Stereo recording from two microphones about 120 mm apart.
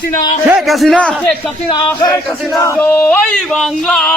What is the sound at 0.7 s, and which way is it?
Speech, centre (ahead or behind).